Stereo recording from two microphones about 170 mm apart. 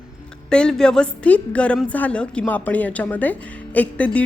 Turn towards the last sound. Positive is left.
turn(degrees=10)  # may be behind; listen again after turning